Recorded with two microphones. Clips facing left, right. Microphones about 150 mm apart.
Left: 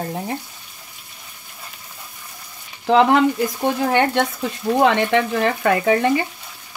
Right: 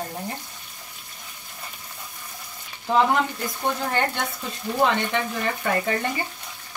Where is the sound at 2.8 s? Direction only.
85° left.